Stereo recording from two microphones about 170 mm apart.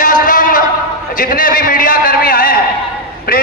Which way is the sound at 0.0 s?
55° left (ahead or behind).